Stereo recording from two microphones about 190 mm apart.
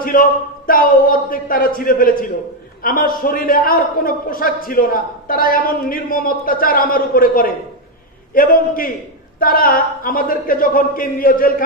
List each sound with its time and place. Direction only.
0.0 s a man's voice: 50° left (ahead or behind)